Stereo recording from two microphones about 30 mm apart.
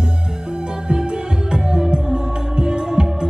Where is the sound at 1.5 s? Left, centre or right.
Right.